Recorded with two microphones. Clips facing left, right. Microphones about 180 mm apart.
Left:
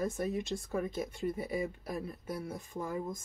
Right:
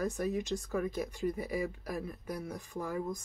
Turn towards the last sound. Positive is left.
turn(degrees=25)  # may be behind; listen again after turning